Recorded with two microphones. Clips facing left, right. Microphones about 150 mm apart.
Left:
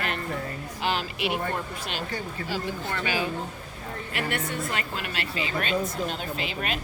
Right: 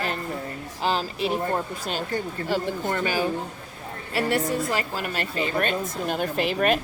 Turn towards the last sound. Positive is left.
turn(degrees=-50)  # may be behind; listen again after turning